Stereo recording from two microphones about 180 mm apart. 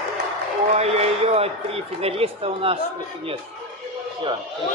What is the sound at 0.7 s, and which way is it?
Speech, 35° right (ahead or behind).